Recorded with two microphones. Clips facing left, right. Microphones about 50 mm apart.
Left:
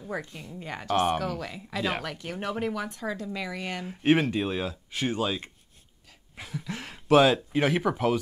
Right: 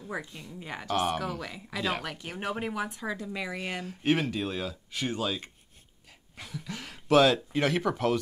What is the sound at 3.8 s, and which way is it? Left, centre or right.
Speech, centre.